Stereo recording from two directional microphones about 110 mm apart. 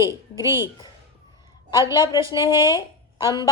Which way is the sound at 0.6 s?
40° left (ahead or behind).